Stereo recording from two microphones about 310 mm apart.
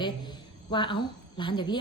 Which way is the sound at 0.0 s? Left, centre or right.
Centre.